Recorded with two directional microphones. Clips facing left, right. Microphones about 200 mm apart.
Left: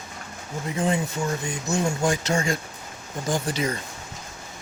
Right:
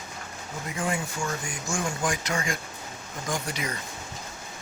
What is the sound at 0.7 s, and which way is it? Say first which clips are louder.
Speech: left 6 dB; 25° left (ahead or behind).